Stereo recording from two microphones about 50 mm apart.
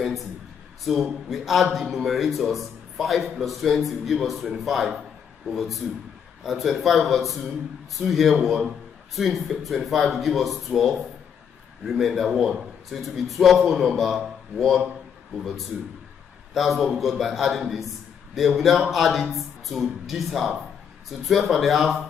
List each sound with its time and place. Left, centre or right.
0.8 s a man's voice: centre
15.3 s a man's voice: centre